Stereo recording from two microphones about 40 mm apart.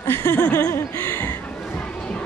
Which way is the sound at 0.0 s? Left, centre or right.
Left.